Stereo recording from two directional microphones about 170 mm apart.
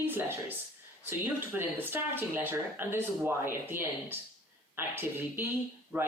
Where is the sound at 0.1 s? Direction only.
10° right (ahead or behind).